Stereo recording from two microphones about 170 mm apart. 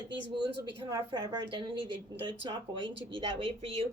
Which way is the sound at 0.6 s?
25° right (ahead or behind).